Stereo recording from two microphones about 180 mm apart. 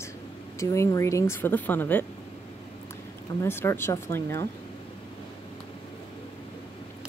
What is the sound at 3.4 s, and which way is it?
Speech, 15° left (ahead or behind).